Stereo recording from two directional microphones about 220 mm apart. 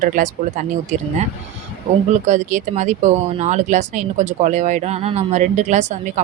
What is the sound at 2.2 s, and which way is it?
Speech, 30° right (ahead or behind).